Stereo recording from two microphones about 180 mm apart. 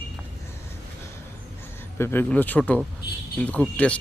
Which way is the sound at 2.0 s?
10° left (ahead or behind).